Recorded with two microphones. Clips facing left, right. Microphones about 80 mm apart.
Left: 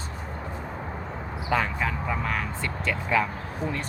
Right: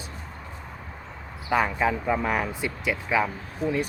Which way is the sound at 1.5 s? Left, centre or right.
Centre.